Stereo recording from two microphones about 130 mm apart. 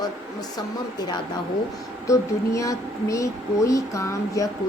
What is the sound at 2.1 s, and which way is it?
Speech, 25° left (ahead or behind).